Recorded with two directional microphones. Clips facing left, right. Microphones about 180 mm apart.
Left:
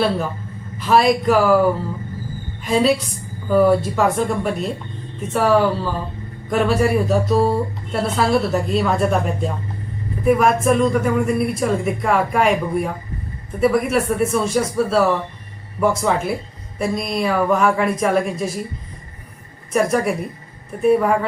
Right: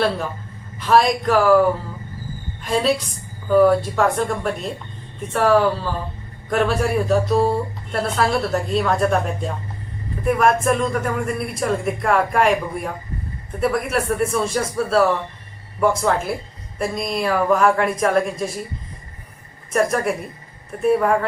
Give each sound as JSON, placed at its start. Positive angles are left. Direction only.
{"t": 0.8, "sound": "speech", "side_deg": 0}
{"t": 2.6, "sound": "speech", "side_deg": 0}
{"t": 19.7, "sound": "speech", "side_deg": 0}